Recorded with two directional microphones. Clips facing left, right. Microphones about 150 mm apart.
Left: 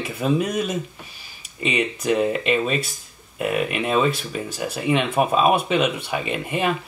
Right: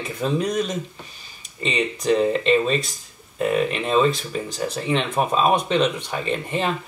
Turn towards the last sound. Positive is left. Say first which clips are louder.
# even
turn(degrees=10)  # may be behind; listen again after turning